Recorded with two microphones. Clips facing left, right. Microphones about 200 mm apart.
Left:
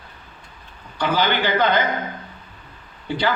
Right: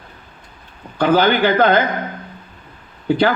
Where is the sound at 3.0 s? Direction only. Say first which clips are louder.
Right 8 dB; 55° right (ahead or behind).